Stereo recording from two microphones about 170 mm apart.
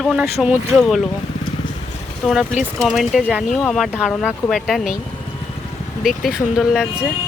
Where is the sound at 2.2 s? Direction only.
Centre (ahead or behind).